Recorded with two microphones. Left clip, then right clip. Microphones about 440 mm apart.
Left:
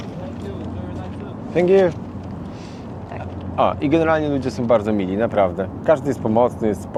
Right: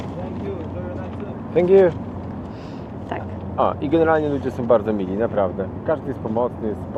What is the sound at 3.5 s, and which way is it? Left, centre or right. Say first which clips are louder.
Speech: left 1 dB; centre.